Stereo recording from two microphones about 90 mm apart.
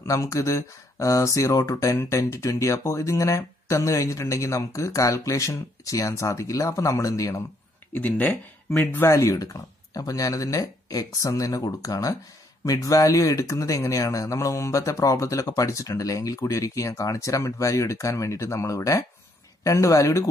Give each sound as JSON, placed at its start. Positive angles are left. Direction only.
{"t": 0.0, "sound": "speech", "side_deg": 35}
{"t": 7.9, "sound": "speech", "side_deg": 20}
{"t": 9.0, "sound": "speech", "side_deg": 35}